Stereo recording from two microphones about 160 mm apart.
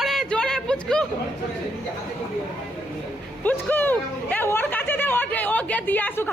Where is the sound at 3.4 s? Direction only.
10° left (ahead or behind).